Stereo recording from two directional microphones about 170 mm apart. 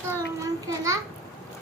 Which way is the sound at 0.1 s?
20° right (ahead or behind).